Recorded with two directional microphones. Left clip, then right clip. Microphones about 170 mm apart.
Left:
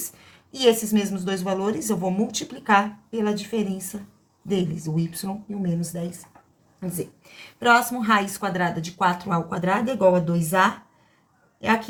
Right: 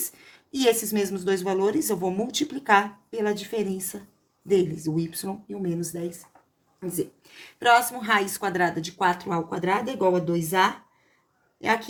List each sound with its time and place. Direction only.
0.2 s a woman's voice: 30° right (ahead or behind)
7.6 s speech: 25° right (ahead or behind)